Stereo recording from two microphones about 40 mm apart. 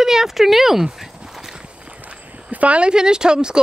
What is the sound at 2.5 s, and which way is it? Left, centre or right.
Speech, right.